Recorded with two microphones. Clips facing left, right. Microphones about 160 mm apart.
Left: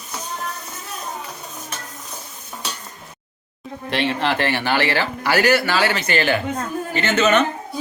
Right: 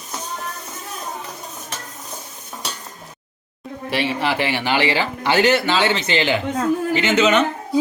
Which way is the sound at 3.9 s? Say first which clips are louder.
Even; 10° right (ahead or behind).